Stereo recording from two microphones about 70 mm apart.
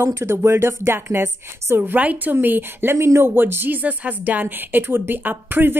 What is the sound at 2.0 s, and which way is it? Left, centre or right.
A woman's voice, right.